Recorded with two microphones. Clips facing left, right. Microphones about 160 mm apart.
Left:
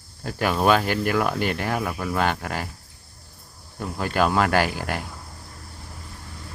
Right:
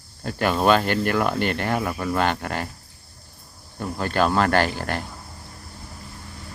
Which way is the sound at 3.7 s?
5° left (ahead or behind).